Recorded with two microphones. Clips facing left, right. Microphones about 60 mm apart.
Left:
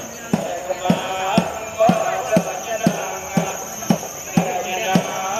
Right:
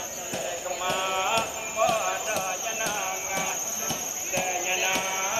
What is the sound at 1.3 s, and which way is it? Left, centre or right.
Music, left.